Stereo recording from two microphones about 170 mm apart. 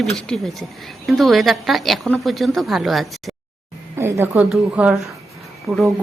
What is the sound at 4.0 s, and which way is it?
A woman's voice, 15° right (ahead or behind).